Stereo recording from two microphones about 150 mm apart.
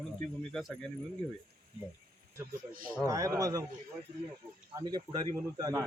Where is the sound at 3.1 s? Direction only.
20° right (ahead or behind).